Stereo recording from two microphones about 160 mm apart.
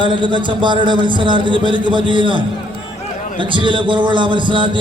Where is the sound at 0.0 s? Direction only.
30° right (ahead or behind).